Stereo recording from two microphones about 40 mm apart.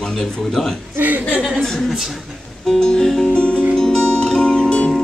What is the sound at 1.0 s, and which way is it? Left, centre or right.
Speech, right.